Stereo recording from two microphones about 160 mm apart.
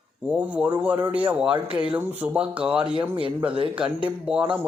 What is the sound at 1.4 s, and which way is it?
Speech, 35° right (ahead or behind).